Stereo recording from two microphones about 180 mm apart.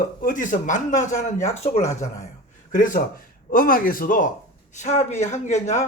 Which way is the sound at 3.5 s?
50° left (ahead or behind).